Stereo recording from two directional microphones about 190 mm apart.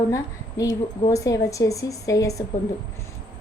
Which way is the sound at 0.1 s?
15° left (ahead or behind).